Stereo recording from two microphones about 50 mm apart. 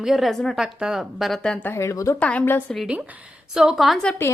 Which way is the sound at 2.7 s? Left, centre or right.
Centre.